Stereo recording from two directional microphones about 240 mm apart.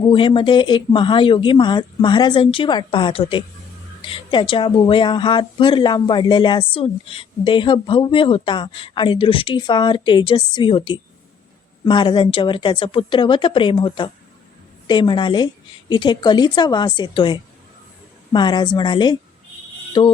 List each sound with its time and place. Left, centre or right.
0.1 s a woman's voice: centre